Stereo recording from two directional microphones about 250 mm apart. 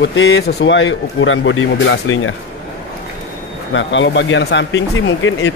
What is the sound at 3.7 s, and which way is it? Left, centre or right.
Speech, left.